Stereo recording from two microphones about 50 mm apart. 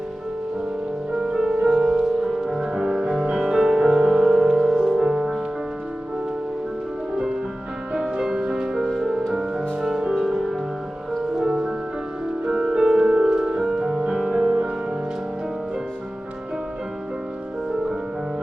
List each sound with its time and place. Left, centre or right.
1.6 s music: centre
8.2 s music: centre
12.5 s music: centre